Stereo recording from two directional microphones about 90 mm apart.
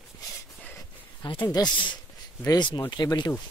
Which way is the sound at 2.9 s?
50° left (ahead or behind).